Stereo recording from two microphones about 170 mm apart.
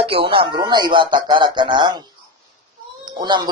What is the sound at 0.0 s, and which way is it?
Speech, 35° right (ahead or behind).